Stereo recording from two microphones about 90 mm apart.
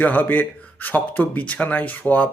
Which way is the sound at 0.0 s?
20° left (ahead or behind).